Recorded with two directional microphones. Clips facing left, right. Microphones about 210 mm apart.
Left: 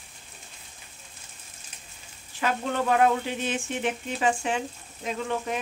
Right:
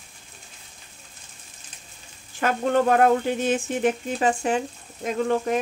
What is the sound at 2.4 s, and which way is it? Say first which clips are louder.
Speech: right 6 dB; 50° right (ahead or behind).